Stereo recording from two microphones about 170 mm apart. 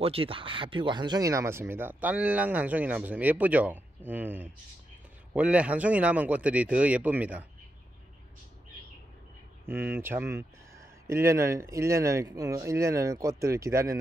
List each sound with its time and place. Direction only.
0.0 s speech: 35° right (ahead or behind); by 7.4 s 10° right (ahead or behind)
9.7 s speech: 15° right (ahead or behind)